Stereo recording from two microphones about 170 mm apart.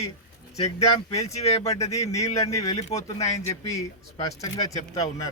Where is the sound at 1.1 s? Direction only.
40° left (ahead or behind).